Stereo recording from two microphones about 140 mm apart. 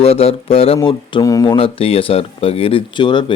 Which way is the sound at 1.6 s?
40° left (ahead or behind).